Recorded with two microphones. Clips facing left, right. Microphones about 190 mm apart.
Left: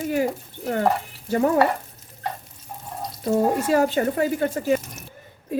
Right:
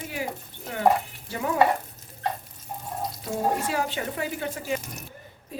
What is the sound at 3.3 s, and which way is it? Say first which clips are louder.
A woman's voice: left 8 dB; 45° left (ahead or behind).